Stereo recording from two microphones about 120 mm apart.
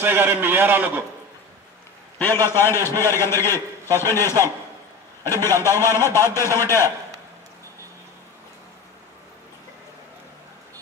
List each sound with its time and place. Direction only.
0.0 s a man's voice: 20° right (ahead or behind)
2.1 s a man's voice: 20° left (ahead or behind)